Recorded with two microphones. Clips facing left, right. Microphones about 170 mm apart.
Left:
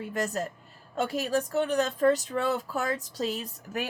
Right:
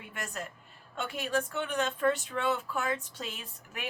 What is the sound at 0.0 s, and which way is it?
Speech, 40° left (ahead or behind).